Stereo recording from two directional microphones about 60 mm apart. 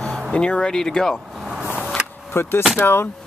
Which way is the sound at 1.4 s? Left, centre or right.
Centre.